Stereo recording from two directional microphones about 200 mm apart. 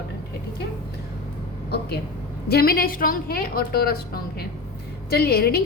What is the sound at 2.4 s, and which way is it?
A woman's voice, 50° left (ahead or behind).